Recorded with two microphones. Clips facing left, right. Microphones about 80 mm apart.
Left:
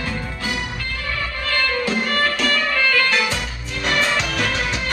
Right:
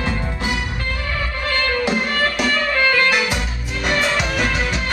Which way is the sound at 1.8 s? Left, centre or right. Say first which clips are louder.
Right 1 dB; centre.